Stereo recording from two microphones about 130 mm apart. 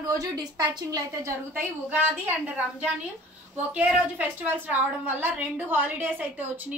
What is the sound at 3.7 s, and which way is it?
A woman's voice, 10° right (ahead or behind).